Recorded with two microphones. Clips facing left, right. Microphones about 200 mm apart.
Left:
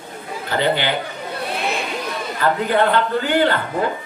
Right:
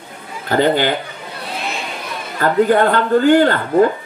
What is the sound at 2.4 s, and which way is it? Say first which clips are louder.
Speech: right 5 dB; 45° right (ahead or behind).